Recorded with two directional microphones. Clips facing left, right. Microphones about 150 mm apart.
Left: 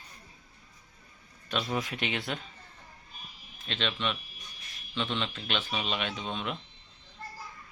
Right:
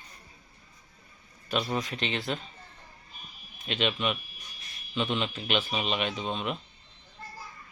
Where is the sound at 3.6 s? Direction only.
10° right (ahead or behind).